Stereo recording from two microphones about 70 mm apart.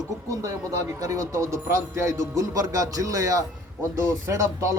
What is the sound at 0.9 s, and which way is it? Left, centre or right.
A man's voice, right.